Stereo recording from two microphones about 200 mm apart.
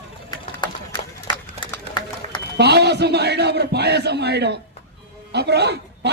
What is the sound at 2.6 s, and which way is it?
A man's voice, 55° right (ahead or behind).